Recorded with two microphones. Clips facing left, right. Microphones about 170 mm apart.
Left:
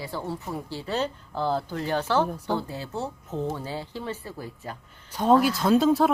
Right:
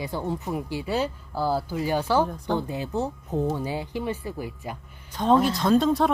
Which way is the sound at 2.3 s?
10° left (ahead or behind).